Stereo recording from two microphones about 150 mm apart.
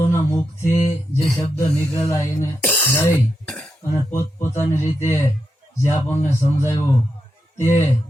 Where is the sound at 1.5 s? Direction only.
20° left (ahead or behind).